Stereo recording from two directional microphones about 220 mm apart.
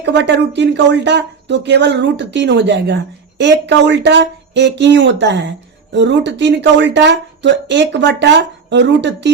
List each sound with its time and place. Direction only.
0.0 s speech: 50° right (ahead or behind)